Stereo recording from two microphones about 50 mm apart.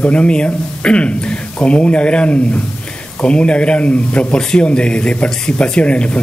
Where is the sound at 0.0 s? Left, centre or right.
Left.